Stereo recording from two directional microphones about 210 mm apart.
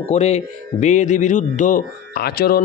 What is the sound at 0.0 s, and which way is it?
A man's voice, 30° left (ahead or behind).